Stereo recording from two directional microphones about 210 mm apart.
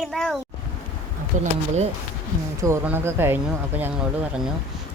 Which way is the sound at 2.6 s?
10° right (ahead or behind).